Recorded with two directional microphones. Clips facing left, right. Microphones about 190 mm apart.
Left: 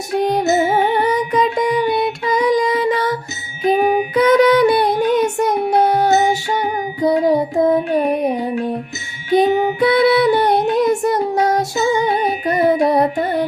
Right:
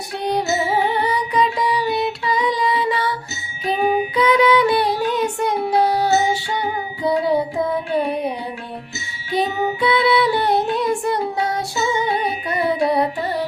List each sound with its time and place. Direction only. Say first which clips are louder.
0.2 s music: left 5 dB; 50° left (ahead or behind)
1.1 s child singing: left 3 dB; 45° left (ahead or behind)
6.5 s music: left 4 dB; 45° left (ahead or behind)
7.3 s child singing: left 5 dB; 45° left (ahead or behind)
9.3 s music: left 7 dB; 45° left (ahead or behind)